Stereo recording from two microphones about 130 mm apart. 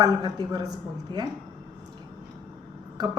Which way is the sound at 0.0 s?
30° right (ahead or behind).